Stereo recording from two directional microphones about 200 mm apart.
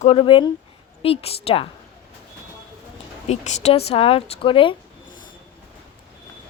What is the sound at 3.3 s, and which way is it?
A woman's voice, 35° left (ahead or behind).